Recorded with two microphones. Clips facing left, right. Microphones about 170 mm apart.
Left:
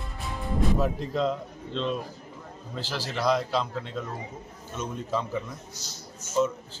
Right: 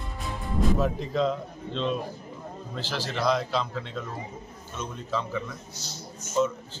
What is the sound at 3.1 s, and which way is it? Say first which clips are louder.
Speech: left 1 dB; 5° left (ahead or behind).